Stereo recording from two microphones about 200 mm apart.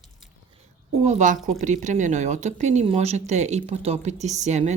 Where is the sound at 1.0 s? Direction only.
40° right (ahead or behind).